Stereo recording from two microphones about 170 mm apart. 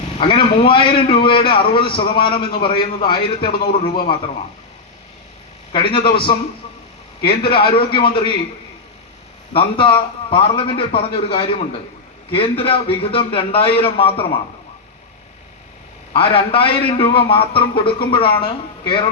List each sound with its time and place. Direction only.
0.2 s a man's voice: 30° left (ahead or behind)
5.7 s a man's voice: 30° left (ahead or behind)
9.5 s a man's voice: 30° left (ahead or behind)
16.1 s a man's voice: 35° left (ahead or behind)